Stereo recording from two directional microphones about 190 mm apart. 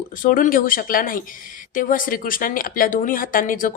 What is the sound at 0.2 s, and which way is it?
A woman's voice, 45° left (ahead or behind).